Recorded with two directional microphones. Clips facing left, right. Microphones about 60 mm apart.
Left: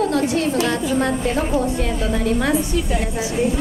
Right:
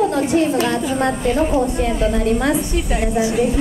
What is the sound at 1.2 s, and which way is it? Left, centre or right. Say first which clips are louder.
A woman's voice: right 3 dB; centre.